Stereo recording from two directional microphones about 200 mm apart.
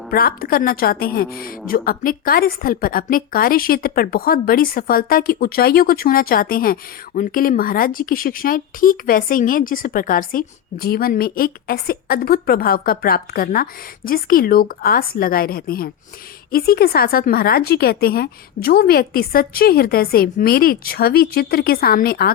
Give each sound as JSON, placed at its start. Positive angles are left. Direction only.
{"t": 0.1, "sound": "a woman's voice", "side_deg": 45}